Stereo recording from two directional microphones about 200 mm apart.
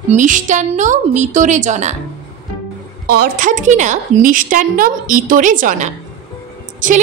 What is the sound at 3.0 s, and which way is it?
A woman's voice, 50° right (ahead or behind).